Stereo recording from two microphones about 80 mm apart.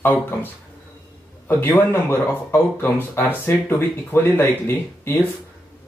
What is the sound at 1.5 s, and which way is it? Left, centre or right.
Speech, left.